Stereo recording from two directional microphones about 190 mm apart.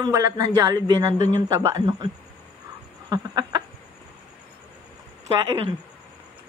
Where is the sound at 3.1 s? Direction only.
20° right (ahead or behind).